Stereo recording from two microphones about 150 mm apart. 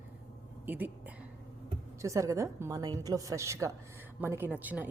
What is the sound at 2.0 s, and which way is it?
A woman's voice, 20° right (ahead or behind).